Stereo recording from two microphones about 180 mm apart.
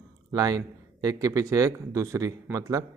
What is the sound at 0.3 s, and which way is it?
Speech, 20° right (ahead or behind).